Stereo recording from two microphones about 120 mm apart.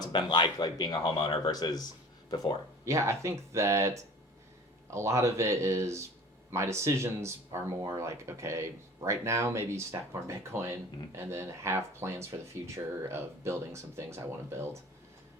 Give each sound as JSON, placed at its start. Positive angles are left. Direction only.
{"t": 0.0, "sound": "speech", "side_deg": 35}
{"t": 2.8, "sound": "speech", "side_deg": -25}